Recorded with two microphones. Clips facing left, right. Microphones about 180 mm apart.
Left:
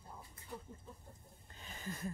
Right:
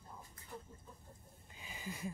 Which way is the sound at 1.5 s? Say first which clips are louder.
Left 1 dB; 10° right (ahead or behind).